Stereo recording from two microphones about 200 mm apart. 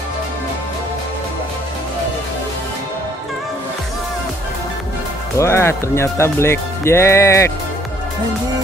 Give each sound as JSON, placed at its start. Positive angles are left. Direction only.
{"t": 5.4, "sound": "speech", "side_deg": 15}